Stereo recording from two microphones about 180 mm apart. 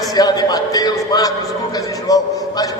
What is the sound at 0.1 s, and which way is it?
A man's voice, 20° left (ahead or behind).